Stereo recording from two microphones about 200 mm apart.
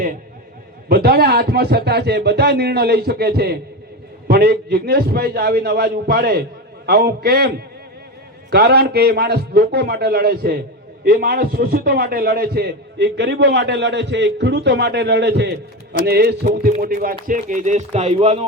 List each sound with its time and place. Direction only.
0.9 s a man's voice: 50° right (ahead or behind); by 18.4 s 30° right (ahead or behind)